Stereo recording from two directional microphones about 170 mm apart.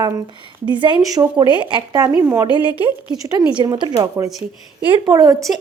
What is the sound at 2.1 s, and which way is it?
Speech, 15° right (ahead or behind).